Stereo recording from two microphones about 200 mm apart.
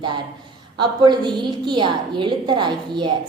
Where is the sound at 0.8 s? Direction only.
25° right (ahead or behind).